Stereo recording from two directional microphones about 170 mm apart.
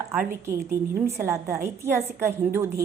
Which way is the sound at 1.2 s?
15° right (ahead or behind).